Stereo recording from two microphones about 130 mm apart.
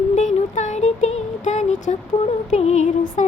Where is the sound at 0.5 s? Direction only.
65° left (ahead or behind).